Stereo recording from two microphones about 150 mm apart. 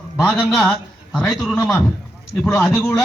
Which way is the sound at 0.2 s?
5° left (ahead or behind).